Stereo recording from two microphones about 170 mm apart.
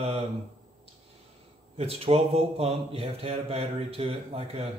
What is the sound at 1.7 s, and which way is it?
Speech, 35° right (ahead or behind).